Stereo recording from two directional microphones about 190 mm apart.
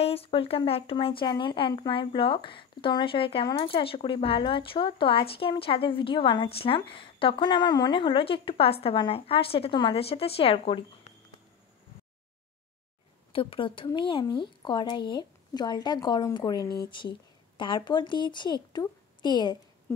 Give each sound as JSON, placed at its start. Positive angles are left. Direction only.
{"t": 0.0, "sound": "speech", "side_deg": 30}
{"t": 13.3, "sound": "speech", "side_deg": 30}